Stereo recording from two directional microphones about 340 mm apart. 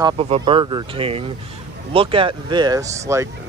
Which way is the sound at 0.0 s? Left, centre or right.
Centre.